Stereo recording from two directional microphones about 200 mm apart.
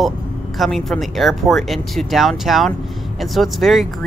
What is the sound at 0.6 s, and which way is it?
Speech, centre (ahead or behind).